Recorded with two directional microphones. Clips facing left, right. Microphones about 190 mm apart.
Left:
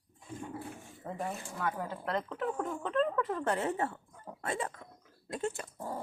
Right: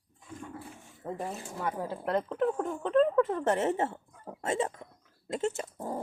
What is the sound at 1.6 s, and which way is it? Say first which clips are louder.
Speech: right 2 dB; 25° right (ahead or behind).